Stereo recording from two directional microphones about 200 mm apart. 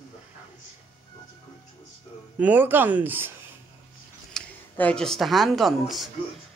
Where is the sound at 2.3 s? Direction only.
10° right (ahead or behind).